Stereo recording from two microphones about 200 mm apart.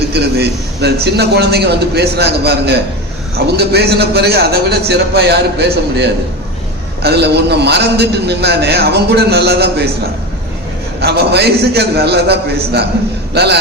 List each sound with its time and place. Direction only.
0.1 s a man's voice: 55° right (ahead or behind)
11.0 s a man's voice: 55° right (ahead or behind)